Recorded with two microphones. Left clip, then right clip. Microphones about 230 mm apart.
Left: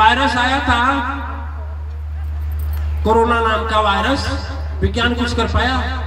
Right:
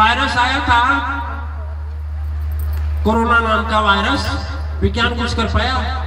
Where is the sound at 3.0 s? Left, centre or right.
Left.